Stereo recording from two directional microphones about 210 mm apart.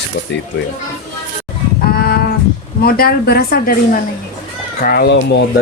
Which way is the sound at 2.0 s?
45° left (ahead or behind).